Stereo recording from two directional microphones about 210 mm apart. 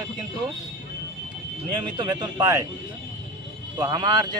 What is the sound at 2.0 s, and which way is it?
Speech, 20° right (ahead or behind).